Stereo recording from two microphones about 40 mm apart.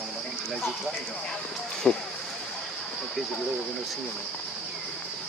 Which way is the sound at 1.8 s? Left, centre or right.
Left.